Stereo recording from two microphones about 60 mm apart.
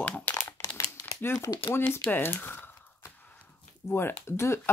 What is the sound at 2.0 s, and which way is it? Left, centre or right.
Speech, left.